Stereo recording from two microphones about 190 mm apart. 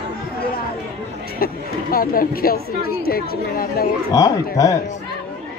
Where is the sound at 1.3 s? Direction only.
50° left (ahead or behind).